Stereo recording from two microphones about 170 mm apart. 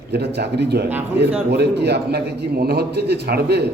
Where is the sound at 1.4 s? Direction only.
80° right.